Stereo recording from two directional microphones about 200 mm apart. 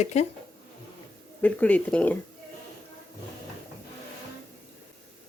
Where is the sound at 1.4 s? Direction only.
5° left (ahead or behind).